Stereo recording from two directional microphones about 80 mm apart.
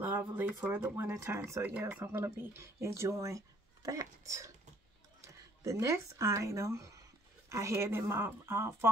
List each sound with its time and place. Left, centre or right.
0.2 s speech: right
5.6 s speech: right